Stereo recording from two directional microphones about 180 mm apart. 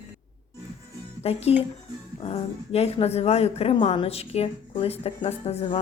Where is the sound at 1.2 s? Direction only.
35° left (ahead or behind).